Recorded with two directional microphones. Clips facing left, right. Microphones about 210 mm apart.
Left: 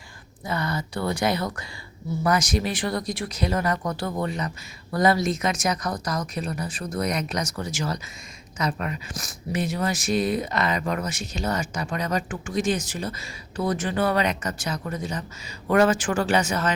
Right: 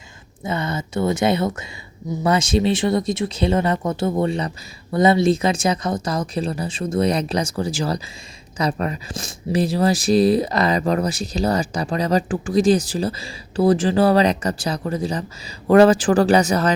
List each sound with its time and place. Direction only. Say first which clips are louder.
0.4 s speech: right 3 dB; 25° right (ahead or behind)